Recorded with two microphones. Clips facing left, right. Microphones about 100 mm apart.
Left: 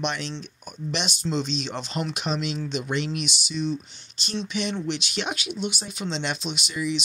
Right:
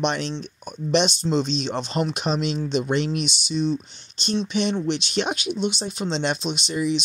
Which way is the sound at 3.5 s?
25° right (ahead or behind).